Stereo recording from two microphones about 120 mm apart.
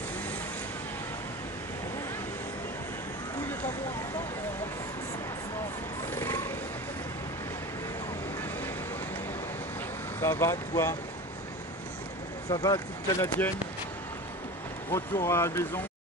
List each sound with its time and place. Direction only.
6.1 s mechanisms: 20° left (ahead or behind)
10.2 s speech: 20° left (ahead or behind)
12.4 s speech: 35° left (ahead or behind)
14.9 s speech: 20° left (ahead or behind)